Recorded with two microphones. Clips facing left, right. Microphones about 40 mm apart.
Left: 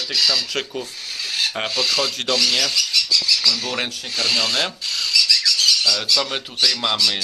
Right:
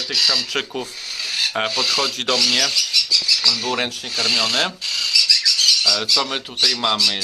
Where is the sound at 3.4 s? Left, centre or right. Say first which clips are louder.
Right 1 dB; centre.